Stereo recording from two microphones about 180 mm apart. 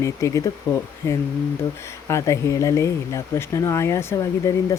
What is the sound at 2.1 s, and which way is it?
Speech, 15° left (ahead or behind).